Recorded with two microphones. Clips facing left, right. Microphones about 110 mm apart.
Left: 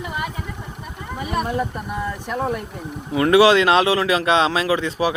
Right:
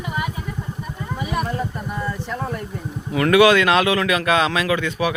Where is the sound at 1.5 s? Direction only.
10° left (ahead or behind).